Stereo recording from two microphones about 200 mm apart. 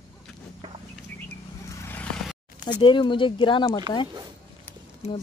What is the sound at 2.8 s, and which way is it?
Speech, 25° left (ahead or behind).